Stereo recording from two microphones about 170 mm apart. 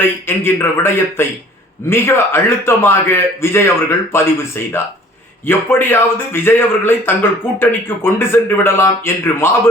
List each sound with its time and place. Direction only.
0.0 s a man's voice: 15° left (ahead or behind)